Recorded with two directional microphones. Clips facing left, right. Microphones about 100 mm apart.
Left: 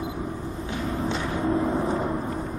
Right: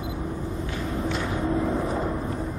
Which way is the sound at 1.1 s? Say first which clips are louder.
Left 1 dB; 30° left (ahead or behind).